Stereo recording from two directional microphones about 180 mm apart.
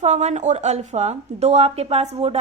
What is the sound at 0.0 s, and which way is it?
Speech, 40° right (ahead or behind).